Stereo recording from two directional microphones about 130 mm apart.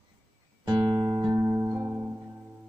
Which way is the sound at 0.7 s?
30° right (ahead or behind).